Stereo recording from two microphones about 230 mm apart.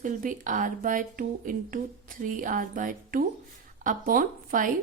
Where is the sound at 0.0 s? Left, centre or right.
Right.